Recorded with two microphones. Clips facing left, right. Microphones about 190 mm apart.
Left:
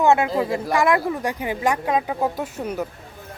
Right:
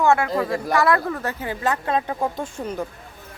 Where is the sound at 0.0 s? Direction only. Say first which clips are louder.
Left 1 dB; 20° left (ahead or behind).